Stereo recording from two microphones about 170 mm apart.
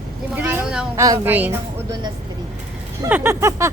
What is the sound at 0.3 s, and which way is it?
Vehicle, 10° right (ahead or behind).